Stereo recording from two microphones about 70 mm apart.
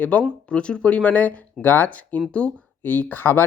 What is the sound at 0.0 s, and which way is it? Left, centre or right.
Speech, centre.